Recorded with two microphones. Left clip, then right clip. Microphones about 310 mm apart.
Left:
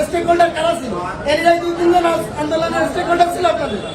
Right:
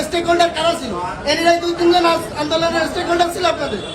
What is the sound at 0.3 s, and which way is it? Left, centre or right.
A man's voice, centre.